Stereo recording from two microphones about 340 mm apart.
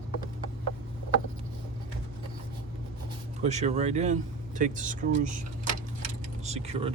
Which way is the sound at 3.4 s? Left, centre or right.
Centre.